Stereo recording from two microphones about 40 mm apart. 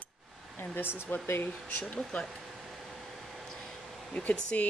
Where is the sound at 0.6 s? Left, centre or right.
Left.